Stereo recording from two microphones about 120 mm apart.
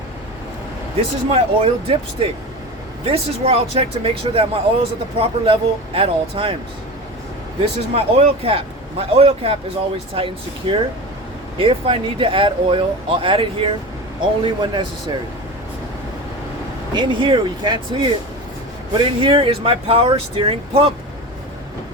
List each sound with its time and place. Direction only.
1.3 s speech: 55° right (ahead or behind)
7.9 s speech: 55° right (ahead or behind)
16.9 s speech: 40° right (ahead or behind)